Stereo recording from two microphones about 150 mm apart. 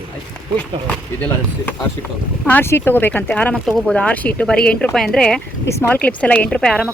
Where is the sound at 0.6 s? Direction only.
10° left (ahead or behind).